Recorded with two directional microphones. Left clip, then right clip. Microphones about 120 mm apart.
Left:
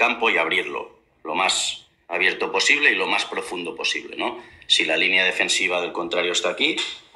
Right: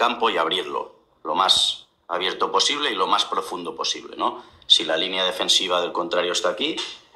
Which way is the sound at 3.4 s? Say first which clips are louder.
Even; 40° right (ahead or behind).